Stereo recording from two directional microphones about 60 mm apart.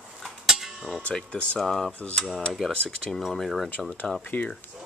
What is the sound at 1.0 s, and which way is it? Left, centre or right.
Speech, centre.